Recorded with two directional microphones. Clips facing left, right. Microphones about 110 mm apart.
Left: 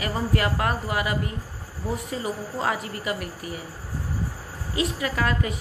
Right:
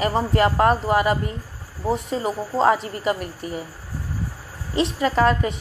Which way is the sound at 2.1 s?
25° right (ahead or behind).